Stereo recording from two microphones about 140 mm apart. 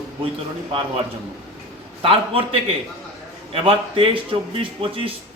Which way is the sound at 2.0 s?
40° right (ahead or behind).